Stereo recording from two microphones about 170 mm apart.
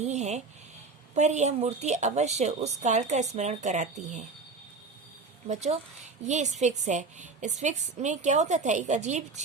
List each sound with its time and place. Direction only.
0.0 s a sound: 40° right (ahead or behind)
1.1 s a woman's voice: 45° right (ahead or behind)
5.5 s a woman's voice: 40° right (ahead or behind)